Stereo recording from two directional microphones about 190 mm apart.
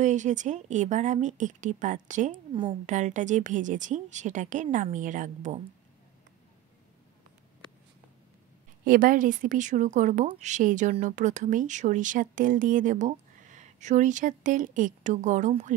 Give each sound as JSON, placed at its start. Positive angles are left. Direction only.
{"t": 0.0, "sound": "speech", "side_deg": -40}
{"t": 8.8, "sound": "speech", "side_deg": -45}